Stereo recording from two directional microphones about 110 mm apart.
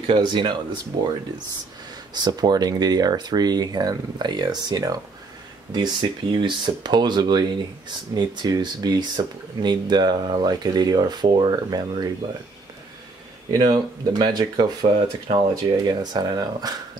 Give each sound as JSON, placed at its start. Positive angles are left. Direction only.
{"t": 0.0, "sound": "speech", "side_deg": -45}
{"t": 2.1, "sound": "speech", "side_deg": -40}
{"t": 13.5, "sound": "speech", "side_deg": -40}